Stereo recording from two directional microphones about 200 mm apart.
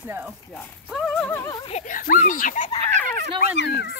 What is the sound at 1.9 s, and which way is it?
Speech, 45° left (ahead or behind).